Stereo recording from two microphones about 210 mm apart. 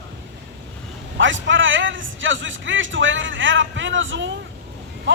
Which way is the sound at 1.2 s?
65° right (ahead or behind).